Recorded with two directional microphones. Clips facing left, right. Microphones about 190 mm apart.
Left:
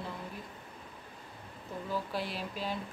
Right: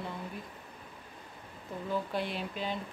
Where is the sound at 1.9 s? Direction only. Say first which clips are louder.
Right 3 dB; centre (ahead or behind).